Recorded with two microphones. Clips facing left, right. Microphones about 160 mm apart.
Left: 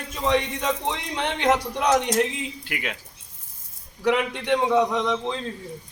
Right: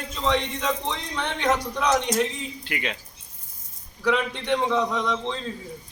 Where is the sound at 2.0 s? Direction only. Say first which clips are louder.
Left 2 dB; 5° left (ahead or behind).